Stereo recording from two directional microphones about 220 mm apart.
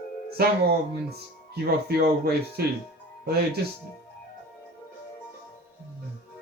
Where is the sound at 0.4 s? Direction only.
45° right (ahead or behind).